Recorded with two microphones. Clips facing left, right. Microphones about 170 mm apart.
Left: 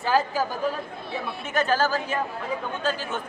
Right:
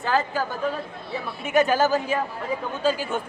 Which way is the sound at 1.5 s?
15° right (ahead or behind).